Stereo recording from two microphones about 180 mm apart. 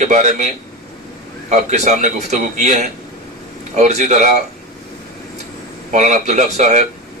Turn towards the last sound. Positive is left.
turn(degrees=-40)  # may be behind; listen again after turning